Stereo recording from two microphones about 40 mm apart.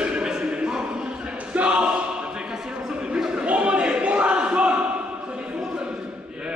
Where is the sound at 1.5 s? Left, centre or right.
Right.